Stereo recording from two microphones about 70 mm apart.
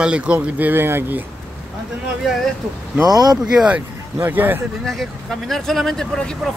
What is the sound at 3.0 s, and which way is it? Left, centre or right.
Speech, right.